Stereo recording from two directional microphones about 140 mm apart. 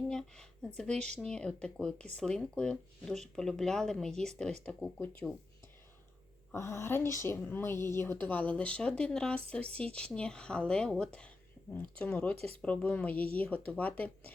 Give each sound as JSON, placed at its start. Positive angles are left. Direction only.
{"t": 0.1, "sound": "a sound", "side_deg": 5}
{"t": 1.2, "sound": "speech", "side_deg": 5}
{"t": 6.5, "sound": "speech", "side_deg": 20}